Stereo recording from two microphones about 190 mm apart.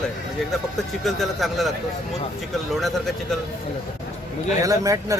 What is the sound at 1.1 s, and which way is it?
Speech, centre (ahead or behind).